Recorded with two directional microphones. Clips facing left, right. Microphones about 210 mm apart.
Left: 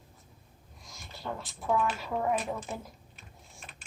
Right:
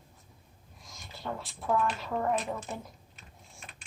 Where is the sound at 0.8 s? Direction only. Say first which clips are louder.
Even; centre (ahead or behind).